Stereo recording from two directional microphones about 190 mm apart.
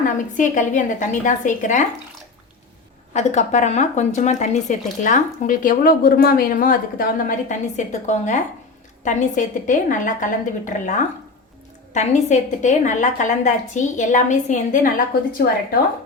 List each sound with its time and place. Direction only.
0.3 s speech: 40° left (ahead or behind)
3.1 s speech: 35° left (ahead or behind)